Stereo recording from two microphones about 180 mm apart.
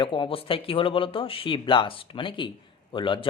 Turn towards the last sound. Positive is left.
turn(degrees=25)  # may be behind; listen again after turning